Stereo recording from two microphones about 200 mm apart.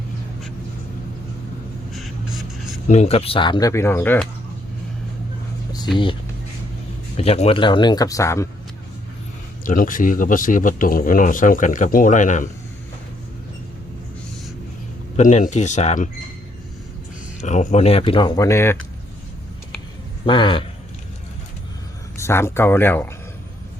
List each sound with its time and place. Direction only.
2.9 s speech: 30° left (ahead or behind); by 4.3 s 10° left (ahead or behind)
7.2 s speech: 30° left (ahead or behind); by 8.4 s 15° left (ahead or behind)
9.6 s a man's voice: 45° left (ahead or behind)
15.1 s speech: 35° left (ahead or behind)
17.4 s speech: 35° left (ahead or behind); by 18.8 s 15° left (ahead or behind)
20.2 s speech: 25° left (ahead or behind)
22.2 s speech: 10° left (ahead or behind)